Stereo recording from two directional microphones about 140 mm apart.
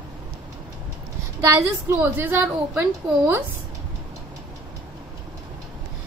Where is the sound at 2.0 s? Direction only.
15° right (ahead or behind).